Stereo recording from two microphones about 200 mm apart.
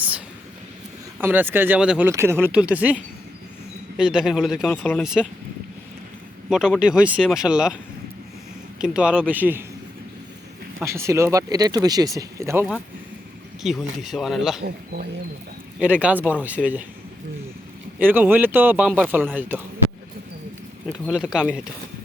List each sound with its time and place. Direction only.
1.2 s speech: 10° right (ahead or behind)
3.9 s speech: 5° right (ahead or behind)
4.7 s speech: 10° left (ahead or behind)
5.0 s speech: 5° right (ahead or behind)
6.5 s speech: centre (ahead or behind)
8.8 s speech: 5° right (ahead or behind)
10.8 s speech: 15° right (ahead or behind)
13.6 s speech: centre (ahead or behind)
14.6 s speech: 55° right (ahead or behind)
15.8 s speech: 5° right (ahead or behind)
18.0 s speech: 10° right (ahead or behind)
20.8 s speech: 5° right (ahead or behind)